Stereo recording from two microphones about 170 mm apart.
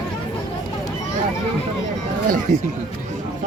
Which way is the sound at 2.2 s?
55° right (ahead or behind).